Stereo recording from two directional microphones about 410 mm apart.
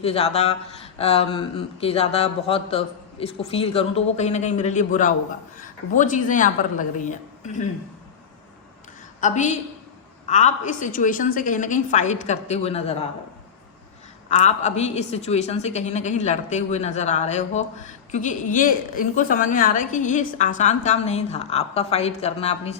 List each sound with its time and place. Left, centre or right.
0.0 s speech: centre
9.2 s speech: centre
14.3 s speech: centre